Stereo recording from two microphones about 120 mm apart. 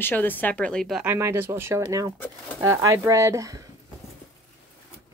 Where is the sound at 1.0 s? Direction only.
20° right (ahead or behind).